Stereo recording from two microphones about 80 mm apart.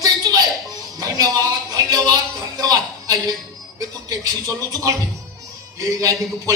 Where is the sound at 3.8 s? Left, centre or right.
Right.